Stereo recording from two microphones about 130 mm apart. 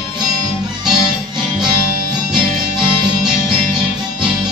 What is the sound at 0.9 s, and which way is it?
Music, 5° right (ahead or behind).